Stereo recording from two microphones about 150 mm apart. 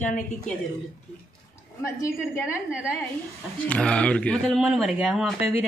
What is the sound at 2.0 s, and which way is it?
Speech, 20° left (ahead or behind).